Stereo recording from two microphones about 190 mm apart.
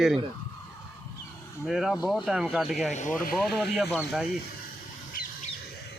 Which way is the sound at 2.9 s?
40° left (ahead or behind).